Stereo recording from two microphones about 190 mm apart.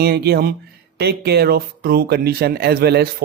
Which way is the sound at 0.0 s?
55° right (ahead or behind).